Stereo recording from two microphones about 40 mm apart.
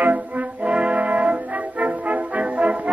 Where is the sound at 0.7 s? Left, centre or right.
Right.